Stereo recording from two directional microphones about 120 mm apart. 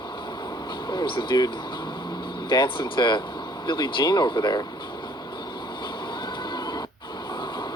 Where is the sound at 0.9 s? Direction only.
40° left (ahead or behind).